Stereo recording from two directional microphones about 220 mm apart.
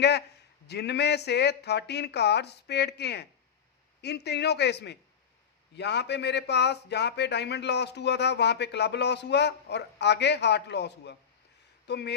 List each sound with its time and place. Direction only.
0.7 s a man's voice: 50° left (ahead or behind)